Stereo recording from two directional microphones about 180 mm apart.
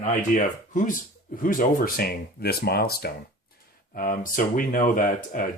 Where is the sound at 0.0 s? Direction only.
45° left (ahead or behind).